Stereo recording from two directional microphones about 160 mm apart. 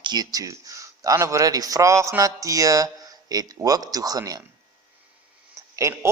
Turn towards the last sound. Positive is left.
turn(degrees=-20)  # may be behind; listen again after turning